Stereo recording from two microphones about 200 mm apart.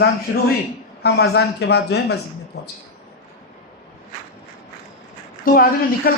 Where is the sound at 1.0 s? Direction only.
55° left (ahead or behind).